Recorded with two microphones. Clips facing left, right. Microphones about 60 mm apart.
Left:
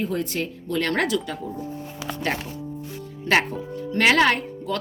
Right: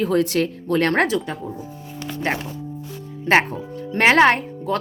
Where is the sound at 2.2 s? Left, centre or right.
Centre.